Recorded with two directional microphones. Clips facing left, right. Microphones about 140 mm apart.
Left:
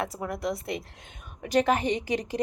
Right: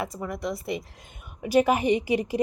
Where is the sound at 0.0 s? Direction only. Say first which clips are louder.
Even; centre (ahead or behind).